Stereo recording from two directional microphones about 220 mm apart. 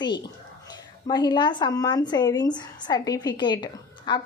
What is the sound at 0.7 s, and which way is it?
Speech, 20° left (ahead or behind).